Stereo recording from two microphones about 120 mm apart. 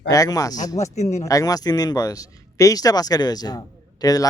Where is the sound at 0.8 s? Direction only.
70° left (ahead or behind).